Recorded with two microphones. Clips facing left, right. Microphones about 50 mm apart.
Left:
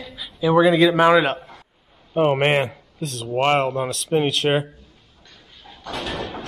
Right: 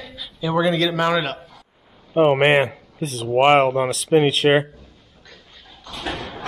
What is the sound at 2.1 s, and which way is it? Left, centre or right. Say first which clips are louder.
Speech: right 3 dB; centre.